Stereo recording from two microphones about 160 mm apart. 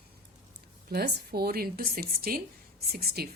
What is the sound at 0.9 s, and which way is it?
Speech, 85° right.